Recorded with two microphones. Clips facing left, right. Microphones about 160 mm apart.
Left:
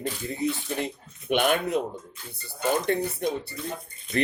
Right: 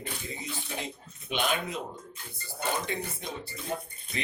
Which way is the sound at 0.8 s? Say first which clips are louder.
Left 7 dB; 60° left (ahead or behind).